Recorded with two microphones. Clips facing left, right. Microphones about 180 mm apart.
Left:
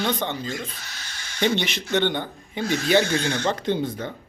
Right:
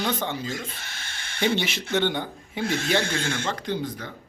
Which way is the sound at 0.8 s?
50° right (ahead or behind).